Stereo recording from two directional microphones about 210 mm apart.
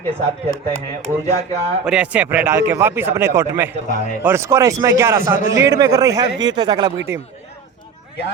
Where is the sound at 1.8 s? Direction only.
5° right (ahead or behind).